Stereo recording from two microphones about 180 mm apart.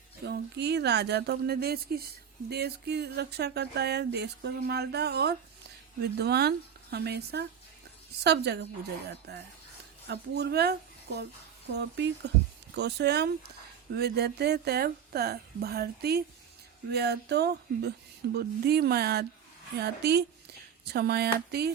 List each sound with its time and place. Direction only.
0.3 s a woman's voice: 65° right (ahead or behind)